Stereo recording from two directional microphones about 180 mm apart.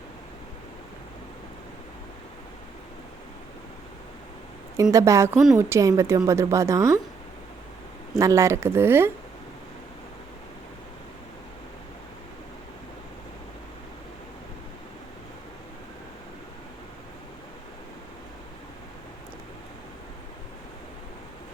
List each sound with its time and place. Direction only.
4.8 s a woman's voice: 15° right (ahead or behind)
8.2 s a woman's voice: 15° right (ahead or behind)